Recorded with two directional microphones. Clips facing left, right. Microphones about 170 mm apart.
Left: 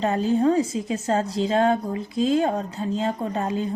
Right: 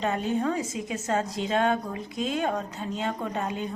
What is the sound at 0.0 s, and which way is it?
A woman's voice, 35° left (ahead or behind).